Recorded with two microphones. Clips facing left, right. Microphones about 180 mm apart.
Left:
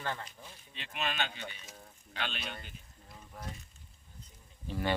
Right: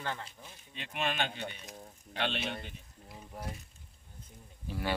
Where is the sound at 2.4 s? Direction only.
25° right (ahead or behind).